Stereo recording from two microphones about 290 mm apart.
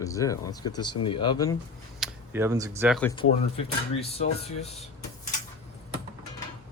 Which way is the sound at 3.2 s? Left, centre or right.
Left.